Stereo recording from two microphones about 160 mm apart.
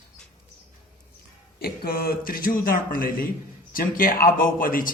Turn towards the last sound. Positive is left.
turn(degrees=60)  # may be behind; listen again after turning